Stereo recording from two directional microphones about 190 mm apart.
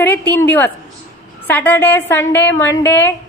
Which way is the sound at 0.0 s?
10° left (ahead or behind).